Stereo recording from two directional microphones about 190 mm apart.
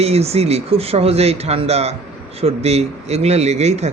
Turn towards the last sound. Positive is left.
turn(degrees=-35)  # may be behind; listen again after turning